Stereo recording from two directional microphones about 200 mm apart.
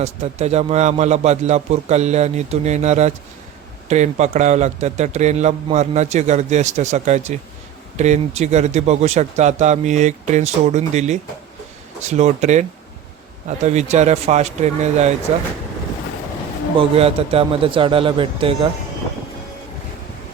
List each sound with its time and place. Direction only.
0.0 s speech: 35° right (ahead or behind)
17.0 s speech: 30° right (ahead or behind)